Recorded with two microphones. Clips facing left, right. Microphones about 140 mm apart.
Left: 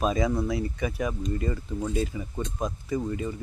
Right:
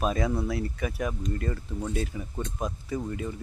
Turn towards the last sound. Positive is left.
turn(degrees=0)  # may be behind; listen again after turning